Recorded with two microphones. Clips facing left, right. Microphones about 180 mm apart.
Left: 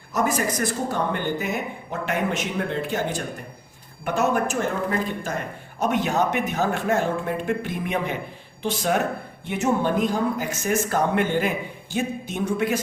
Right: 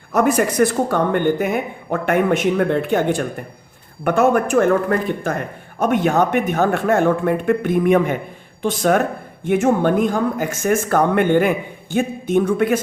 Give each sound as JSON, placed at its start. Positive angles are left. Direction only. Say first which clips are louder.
{"t": 0.1, "sound": "speech", "louder": "right 7 dB", "side_deg": -60}